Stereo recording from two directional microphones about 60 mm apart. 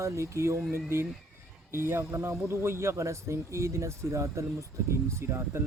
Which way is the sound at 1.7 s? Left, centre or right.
Right.